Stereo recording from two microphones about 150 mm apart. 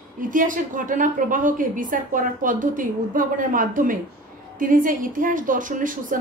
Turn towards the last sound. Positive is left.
turn(degrees=-65)  # may be behind; listen again after turning